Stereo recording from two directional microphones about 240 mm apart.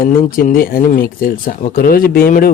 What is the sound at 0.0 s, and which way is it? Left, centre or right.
A man's voice, left.